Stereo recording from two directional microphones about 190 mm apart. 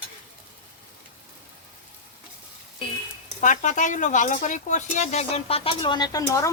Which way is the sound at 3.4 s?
40° left (ahead or behind).